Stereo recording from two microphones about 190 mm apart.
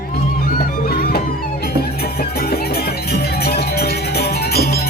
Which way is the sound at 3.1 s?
55° left (ahead or behind).